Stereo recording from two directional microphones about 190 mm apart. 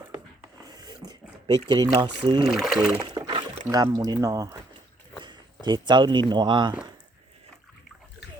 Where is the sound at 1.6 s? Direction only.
25° right (ahead or behind).